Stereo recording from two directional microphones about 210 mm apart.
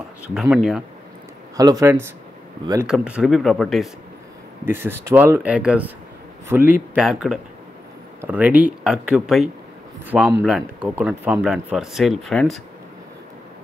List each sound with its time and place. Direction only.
0.3 s speech: centre (ahead or behind)
1.6 s speech: 15° right (ahead or behind)
2.9 s speech: 5° right (ahead or behind)
4.6 s speech: 10° right (ahead or behind)